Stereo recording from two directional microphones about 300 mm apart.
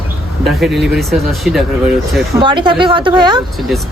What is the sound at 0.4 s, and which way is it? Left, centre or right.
Speech, centre.